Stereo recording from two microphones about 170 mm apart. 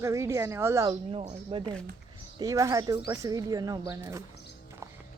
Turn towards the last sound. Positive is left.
turn(degrees=-15)  # may be behind; listen again after turning